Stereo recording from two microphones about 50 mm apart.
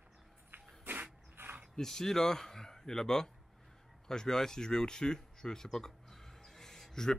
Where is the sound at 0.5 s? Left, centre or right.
Right.